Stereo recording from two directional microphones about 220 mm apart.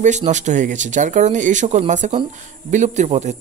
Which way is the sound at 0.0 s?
35° right (ahead or behind).